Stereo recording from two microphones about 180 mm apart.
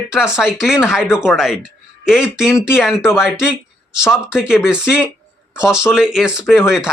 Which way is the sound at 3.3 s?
5° right (ahead or behind).